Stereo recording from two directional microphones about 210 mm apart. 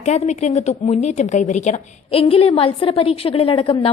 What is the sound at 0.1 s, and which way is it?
A woman's voice, 30° left (ahead or behind).